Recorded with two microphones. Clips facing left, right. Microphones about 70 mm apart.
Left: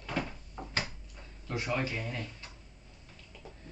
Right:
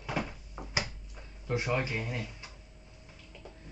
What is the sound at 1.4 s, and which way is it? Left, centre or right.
Speech, centre.